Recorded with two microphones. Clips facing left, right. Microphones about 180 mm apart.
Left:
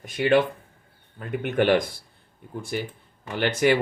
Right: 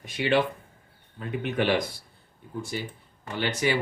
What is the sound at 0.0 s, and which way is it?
Speech, 50° left (ahead or behind).